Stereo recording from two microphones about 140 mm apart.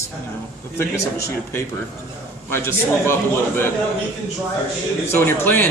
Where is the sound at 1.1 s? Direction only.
15° left (ahead or behind).